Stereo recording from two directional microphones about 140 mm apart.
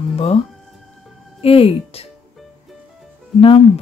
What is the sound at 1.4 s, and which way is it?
Speech, 45° left (ahead or behind).